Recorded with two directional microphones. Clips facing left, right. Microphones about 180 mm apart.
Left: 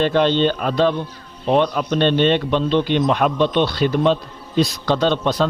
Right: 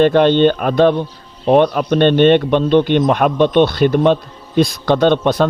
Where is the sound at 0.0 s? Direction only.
55° right (ahead or behind).